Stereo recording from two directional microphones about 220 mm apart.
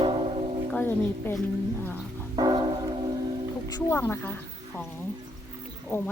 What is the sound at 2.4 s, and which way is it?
Church bell, 20° right (ahead or behind).